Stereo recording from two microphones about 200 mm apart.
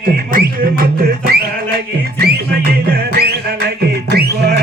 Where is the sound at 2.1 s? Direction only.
50° right (ahead or behind).